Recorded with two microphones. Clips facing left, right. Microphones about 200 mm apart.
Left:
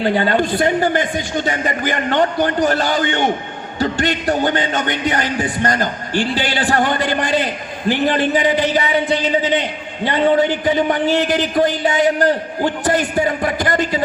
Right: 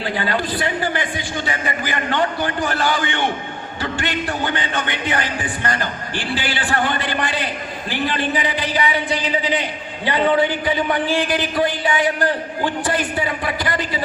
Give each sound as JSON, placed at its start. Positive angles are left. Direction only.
{"t": 0.3, "sound": "speech", "side_deg": 45}
{"t": 10.1, "sound": "speech", "side_deg": 45}